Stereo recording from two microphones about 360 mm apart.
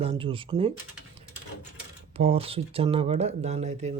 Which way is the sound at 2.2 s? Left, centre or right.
Centre.